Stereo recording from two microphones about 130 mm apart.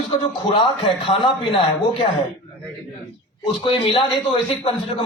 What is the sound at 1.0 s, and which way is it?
Speech, 40° left (ahead or behind).